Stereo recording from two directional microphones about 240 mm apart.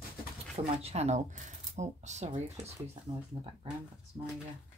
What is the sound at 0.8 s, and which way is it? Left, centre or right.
A woman's voice, right.